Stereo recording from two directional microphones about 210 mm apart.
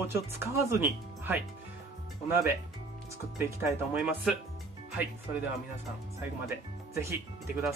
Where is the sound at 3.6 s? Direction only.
10° right (ahead or behind).